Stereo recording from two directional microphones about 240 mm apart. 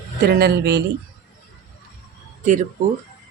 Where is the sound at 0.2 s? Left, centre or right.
Right.